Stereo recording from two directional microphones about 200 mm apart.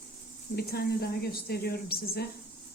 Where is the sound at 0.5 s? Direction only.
50° left (ahead or behind).